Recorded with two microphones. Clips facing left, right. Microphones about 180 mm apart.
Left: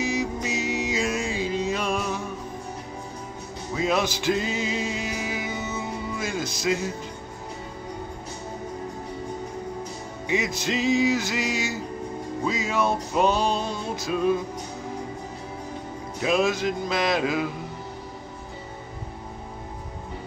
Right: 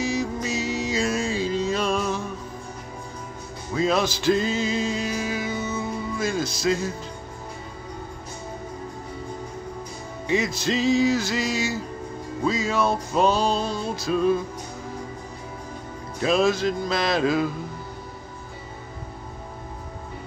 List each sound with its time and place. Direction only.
0.0 s music: 15° left (ahead or behind)
3.7 s music: 15° left (ahead or behind)
10.2 s music: 15° left (ahead or behind)
16.2 s music: 15° left (ahead or behind)